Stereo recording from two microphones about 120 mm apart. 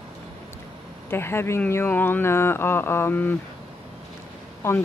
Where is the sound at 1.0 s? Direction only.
20° left (ahead or behind).